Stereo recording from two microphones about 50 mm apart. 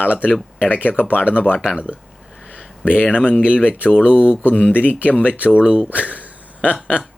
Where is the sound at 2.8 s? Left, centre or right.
Left.